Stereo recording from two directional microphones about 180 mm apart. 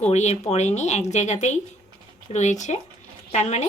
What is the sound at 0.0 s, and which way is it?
Speech, 40° left (ahead or behind).